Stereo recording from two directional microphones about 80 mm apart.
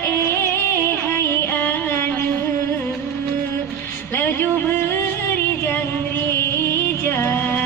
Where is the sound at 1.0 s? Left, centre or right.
Left.